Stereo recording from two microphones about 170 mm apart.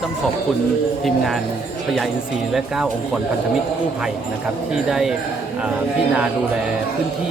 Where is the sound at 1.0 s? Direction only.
Centre (ahead or behind).